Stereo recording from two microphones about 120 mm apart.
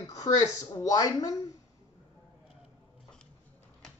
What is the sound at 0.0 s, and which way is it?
Speech, 30° left (ahead or behind).